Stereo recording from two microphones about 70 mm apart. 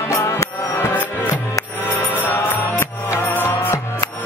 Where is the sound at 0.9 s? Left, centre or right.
Left.